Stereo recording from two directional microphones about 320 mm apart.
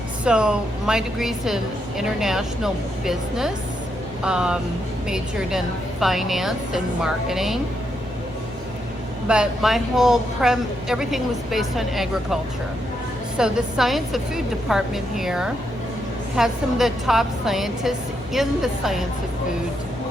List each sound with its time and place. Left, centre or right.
0.3 s a woman's voice: centre
9.2 s a woman's voice: centre